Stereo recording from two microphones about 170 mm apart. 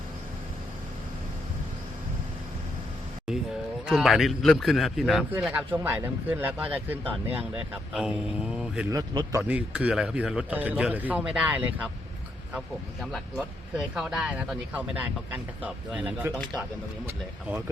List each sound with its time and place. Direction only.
3.8 s a man's voice: centre (ahead or behind)
8.9 s speech: 20° right (ahead or behind)
9.4 s a man's voice: 5° right (ahead or behind)
16.3 s speech: 5° left (ahead or behind)